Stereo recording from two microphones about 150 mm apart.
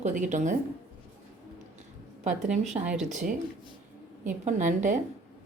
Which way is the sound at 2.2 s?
55° right (ahead or behind).